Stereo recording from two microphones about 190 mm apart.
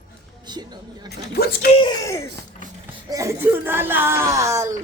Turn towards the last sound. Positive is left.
turn(degrees=-15)  # may be behind; listen again after turning